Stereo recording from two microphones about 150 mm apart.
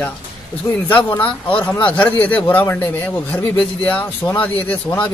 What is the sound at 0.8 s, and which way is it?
A man's voice, 10° left (ahead or behind).